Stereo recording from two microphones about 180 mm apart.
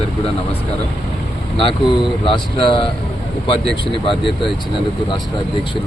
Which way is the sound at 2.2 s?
30° left (ahead or behind).